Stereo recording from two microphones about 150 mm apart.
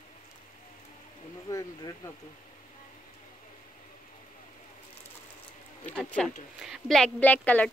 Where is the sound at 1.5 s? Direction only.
25° left (ahead or behind).